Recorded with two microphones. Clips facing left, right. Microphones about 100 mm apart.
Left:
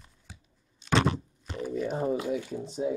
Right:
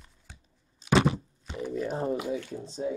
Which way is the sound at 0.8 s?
5° right (ahead or behind).